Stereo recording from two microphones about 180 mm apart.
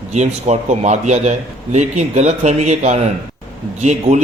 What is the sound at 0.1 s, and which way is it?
A man's voice, 40° right (ahead or behind).